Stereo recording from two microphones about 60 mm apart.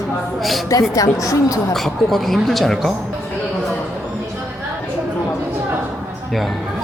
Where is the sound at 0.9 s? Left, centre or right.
Left.